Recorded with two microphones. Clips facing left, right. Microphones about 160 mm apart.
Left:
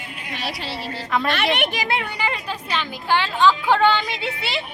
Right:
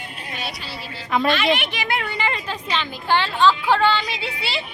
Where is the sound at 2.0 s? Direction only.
10° left (ahead or behind).